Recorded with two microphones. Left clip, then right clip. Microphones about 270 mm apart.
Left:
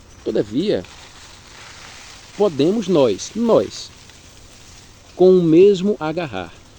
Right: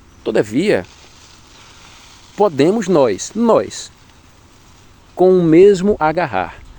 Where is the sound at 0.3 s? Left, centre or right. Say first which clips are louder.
Right 4 dB; right.